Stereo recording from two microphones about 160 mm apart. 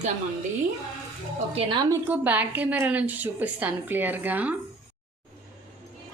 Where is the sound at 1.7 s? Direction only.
25° right (ahead or behind).